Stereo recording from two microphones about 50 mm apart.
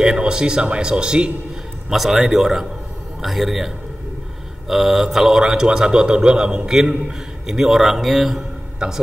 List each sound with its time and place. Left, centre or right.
0.0 s a man's voice: centre
1.9 s a man's voice: centre